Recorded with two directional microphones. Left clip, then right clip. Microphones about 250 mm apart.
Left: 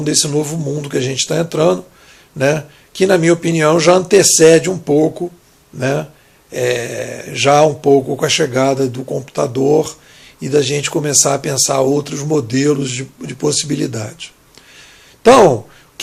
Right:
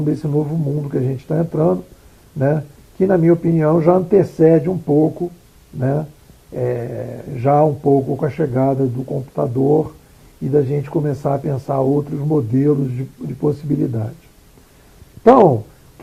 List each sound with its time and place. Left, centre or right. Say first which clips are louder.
0.2 s speech: left 4 dB; left
15.2 s speech: left 3 dB; left